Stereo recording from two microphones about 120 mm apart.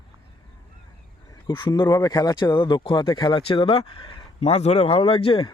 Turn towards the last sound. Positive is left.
turn(degrees=45)  # may be behind; listen again after turning